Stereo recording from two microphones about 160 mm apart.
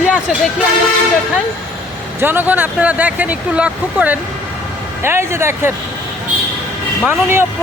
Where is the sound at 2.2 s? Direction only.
10° right (ahead or behind).